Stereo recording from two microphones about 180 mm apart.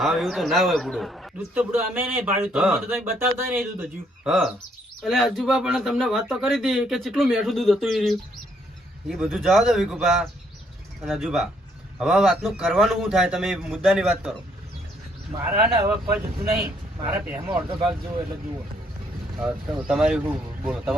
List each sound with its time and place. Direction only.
0.0 s speech: centre (ahead or behind)
1.7 s speech: 10° right (ahead or behind)
3.8 s speech: 5° right (ahead or behind)
15.6 s speech: 15° right (ahead or behind)
19.4 s speech: 5° right (ahead or behind)